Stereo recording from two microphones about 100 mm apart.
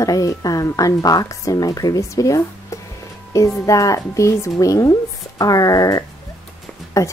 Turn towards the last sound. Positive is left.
turn(degrees=30)  # may be behind; listen again after turning